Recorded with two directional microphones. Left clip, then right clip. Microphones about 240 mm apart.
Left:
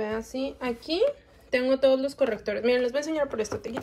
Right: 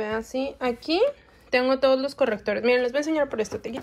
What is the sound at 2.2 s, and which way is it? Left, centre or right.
Speech, centre.